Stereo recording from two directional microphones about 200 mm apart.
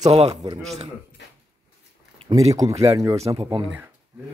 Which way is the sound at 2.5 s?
15° right (ahead or behind).